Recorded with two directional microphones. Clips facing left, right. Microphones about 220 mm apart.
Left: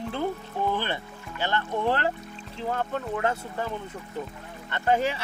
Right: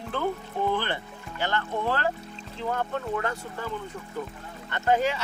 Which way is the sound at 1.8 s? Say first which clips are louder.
Left 3 dB; 20° left (ahead or behind).